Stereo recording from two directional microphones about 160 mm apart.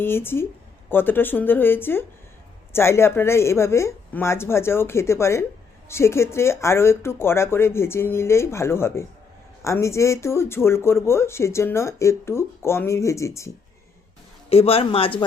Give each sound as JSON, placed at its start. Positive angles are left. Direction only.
{"t": 0.0, "sound": "speech", "side_deg": 15}
{"t": 14.5, "sound": "speech", "side_deg": 35}